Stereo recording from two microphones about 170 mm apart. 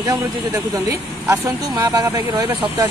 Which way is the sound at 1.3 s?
20° right (ahead or behind).